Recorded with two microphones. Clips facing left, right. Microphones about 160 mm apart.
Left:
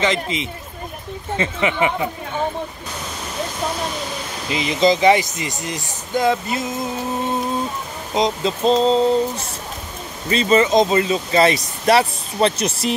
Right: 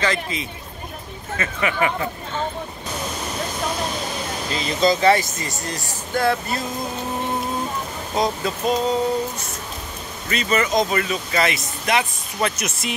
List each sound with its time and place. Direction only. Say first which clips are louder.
0.0 s speech: left 3 dB; 20° left (ahead or behind)
4.5 s speech: left 3 dB; 15° left (ahead or behind)
8.1 s speech: left 3 dB; 20° left (ahead or behind)